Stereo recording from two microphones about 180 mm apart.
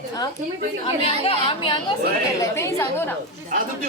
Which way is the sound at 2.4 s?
15° left (ahead or behind).